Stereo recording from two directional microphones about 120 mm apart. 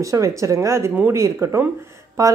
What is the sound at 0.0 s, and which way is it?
Speech, 25° right (ahead or behind).